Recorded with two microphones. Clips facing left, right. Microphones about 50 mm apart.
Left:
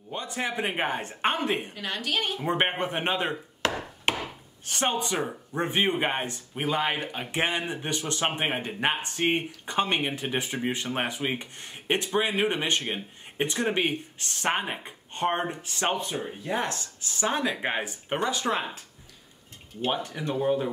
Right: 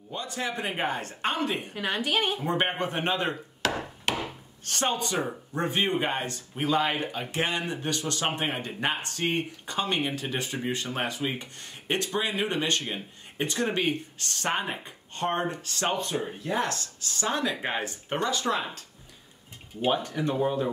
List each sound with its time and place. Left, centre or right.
0.1 s speech: left
1.8 s a woman's voice: centre
2.4 s speech: left
4.6 s speech: centre
4.9 s speech: left
20.2 s speech: centre